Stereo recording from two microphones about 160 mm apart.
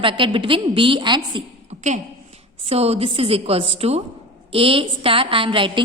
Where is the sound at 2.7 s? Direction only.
40° right (ahead or behind).